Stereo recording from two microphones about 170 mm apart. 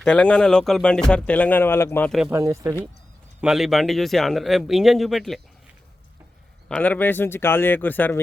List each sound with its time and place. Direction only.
0.0 s speech: 5° left (ahead or behind)
2.0 s speech: centre (ahead or behind)
2.3 s speech: 15° right (ahead or behind)
3.4 s speech: centre (ahead or behind)
6.7 s speech: 10° left (ahead or behind)